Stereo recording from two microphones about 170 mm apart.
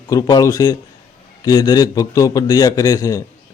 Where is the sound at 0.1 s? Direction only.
20° left (ahead or behind).